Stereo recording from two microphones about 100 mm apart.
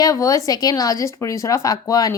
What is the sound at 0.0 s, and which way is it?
Speech, 35° left (ahead or behind).